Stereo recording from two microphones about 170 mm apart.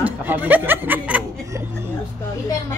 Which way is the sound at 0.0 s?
10° right (ahead or behind).